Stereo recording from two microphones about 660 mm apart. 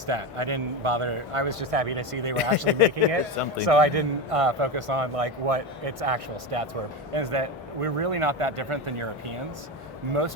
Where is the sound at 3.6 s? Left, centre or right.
Right.